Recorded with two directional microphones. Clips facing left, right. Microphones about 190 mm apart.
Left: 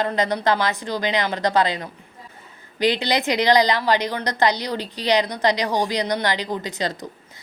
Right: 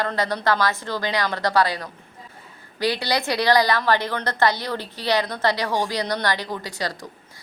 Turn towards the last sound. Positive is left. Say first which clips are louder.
# left 3 dB
turn(degrees=20)  # may be behind; listen again after turning